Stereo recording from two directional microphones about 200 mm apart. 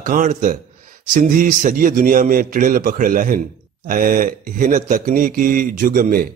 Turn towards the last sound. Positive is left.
turn(degrees=-45)  # may be behind; listen again after turning